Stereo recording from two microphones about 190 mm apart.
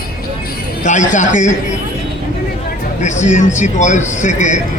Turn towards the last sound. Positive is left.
turn(degrees=40)  # may be behind; listen again after turning